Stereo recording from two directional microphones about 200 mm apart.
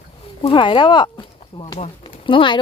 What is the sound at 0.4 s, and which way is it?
Speech, 25° left (ahead or behind).